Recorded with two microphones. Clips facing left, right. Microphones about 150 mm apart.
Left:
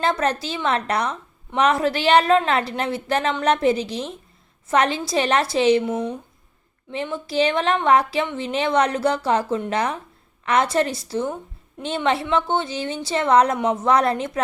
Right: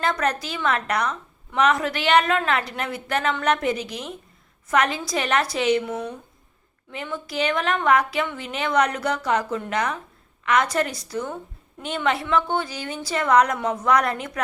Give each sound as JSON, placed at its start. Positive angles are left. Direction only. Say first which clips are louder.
{"t": 0.0, "sound": "a woman's voice", "louder": "left 2 dB", "side_deg": 30}